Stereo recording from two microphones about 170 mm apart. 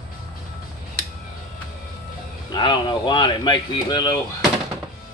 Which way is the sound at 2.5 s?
30° left (ahead or behind).